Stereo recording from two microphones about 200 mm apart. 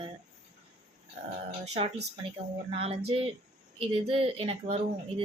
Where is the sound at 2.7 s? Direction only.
30° right (ahead or behind).